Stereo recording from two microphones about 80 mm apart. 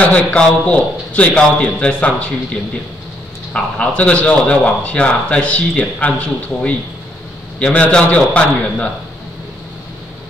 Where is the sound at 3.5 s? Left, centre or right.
Centre.